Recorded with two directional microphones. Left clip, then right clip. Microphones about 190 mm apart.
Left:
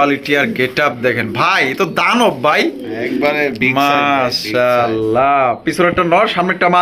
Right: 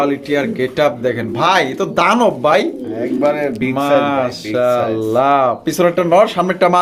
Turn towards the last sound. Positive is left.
turn(degrees=-5)  # may be behind; listen again after turning